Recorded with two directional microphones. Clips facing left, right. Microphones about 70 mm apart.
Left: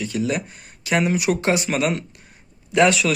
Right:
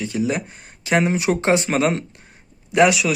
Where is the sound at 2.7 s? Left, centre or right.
Centre.